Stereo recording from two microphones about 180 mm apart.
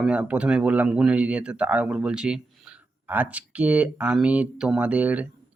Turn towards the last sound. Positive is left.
turn(degrees=-10)  # may be behind; listen again after turning